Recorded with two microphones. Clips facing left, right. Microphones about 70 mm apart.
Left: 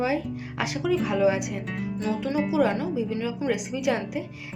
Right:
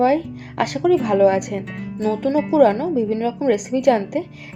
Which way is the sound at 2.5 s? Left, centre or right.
Right.